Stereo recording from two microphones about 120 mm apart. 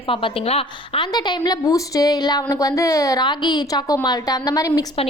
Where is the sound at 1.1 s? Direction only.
35° left (ahead or behind).